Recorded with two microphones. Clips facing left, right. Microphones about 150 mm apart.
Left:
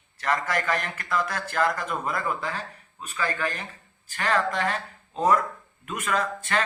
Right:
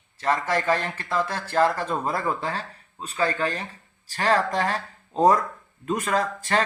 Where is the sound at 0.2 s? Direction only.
25° right (ahead or behind).